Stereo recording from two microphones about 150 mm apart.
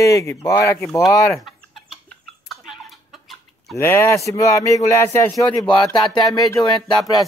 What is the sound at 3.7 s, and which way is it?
Speech, 15° left (ahead or behind).